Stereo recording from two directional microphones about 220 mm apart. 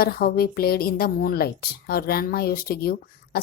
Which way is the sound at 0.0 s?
45° left (ahead or behind).